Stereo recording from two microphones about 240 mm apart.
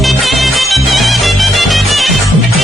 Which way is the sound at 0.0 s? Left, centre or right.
Centre.